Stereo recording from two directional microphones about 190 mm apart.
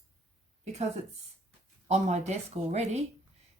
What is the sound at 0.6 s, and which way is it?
Speech, 35° right (ahead or behind).